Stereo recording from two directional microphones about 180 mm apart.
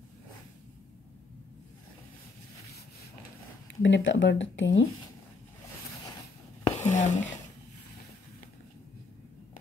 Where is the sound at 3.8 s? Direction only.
85° left.